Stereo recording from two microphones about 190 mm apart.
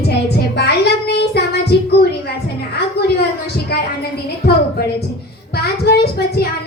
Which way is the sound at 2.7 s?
60° left (ahead or behind).